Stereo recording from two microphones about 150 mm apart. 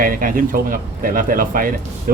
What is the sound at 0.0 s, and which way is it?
Speech, 70° right (ahead or behind).